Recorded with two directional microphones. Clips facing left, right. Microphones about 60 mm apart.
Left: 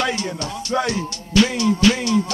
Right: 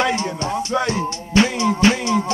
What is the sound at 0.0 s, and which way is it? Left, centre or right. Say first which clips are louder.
Music: right 3 dB; right.